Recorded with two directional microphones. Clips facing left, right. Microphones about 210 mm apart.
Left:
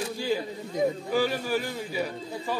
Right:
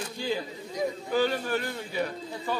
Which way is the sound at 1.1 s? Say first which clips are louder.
Even; 10° left (ahead or behind).